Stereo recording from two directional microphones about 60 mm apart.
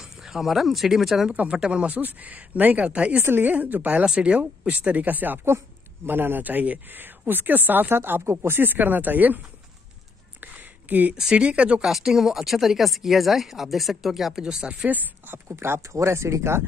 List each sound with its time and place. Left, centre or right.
0.0 s speech: centre
1.3 s speech: right
3.2 s speech: right
10.4 s a sound: right
11.1 s speech: centre
11.8 s speech: centre
14.9 s speech: right
15.4 s speech: right